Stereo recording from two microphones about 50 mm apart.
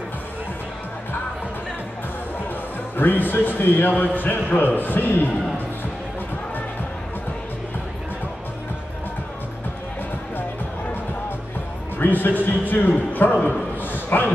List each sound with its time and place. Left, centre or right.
3.0 s a man's voice: left
12.0 s a man's voice: left
13.1 s a sound: left